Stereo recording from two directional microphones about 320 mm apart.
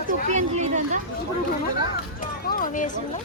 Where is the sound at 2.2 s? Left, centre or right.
Left.